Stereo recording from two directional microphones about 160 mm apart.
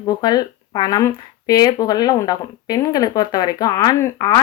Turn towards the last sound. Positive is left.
turn(degrees=25)  # may be behind; listen again after turning